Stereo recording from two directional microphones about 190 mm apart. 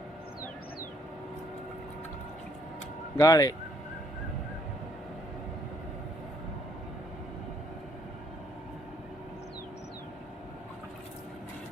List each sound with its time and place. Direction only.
3.2 s speech: 20° left (ahead or behind)